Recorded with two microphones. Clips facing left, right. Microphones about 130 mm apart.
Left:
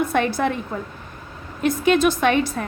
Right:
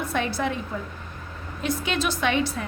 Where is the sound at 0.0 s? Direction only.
55° left (ahead or behind).